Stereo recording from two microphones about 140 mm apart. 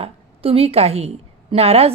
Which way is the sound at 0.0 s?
45° right (ahead or behind).